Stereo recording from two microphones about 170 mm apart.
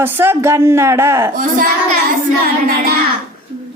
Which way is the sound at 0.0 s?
10° right (ahead or behind).